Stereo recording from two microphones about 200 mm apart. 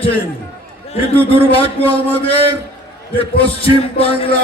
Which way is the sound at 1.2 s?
30° left (ahead or behind).